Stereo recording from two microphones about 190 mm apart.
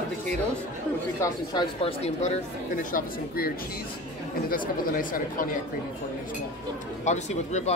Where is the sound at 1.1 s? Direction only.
25° left (ahead or behind); by 3.5 s 45° left (ahead or behind).